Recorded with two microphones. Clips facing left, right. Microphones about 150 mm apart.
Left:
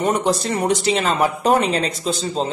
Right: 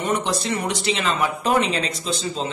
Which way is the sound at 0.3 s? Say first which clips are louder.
Left 5 dB; 40° left (ahead or behind).